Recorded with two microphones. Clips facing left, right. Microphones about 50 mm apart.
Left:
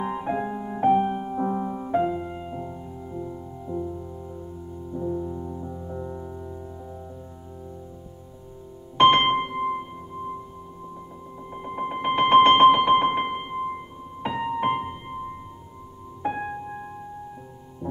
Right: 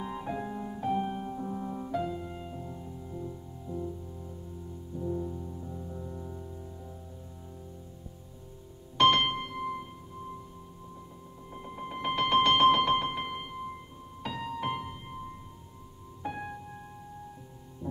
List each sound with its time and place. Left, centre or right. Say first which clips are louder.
0.0 s music: left 8 dB; left
5.0 s music: left 5 dB; left
8.9 s music: left 7 dB; left
11.5 s a sound: left 9 dB; left
12.7 s keyboard: left 7 dB; left
13.0 s keyboard: left 10 dB; left
14.2 s music: left 9 dB; left